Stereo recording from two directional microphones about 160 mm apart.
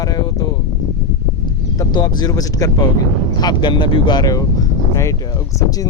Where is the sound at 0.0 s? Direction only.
25° left (ahead or behind).